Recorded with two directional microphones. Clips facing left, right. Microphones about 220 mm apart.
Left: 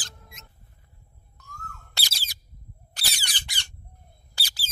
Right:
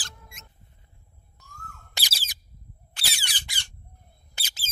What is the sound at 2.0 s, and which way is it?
Bird, 15° right (ahead or behind).